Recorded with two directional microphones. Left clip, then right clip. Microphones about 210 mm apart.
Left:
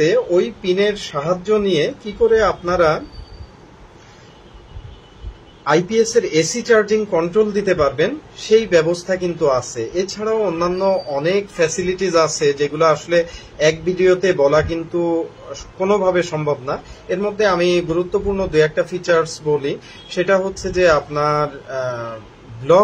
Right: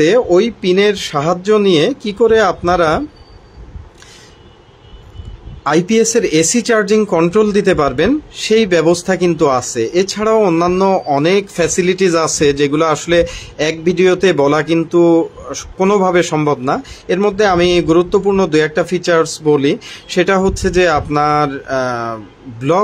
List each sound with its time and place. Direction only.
0.0 s speech: 55° right (ahead or behind)
5.6 s speech: 50° right (ahead or behind)